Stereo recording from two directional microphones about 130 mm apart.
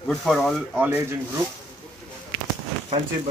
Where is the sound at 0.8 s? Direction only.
15° right (ahead or behind).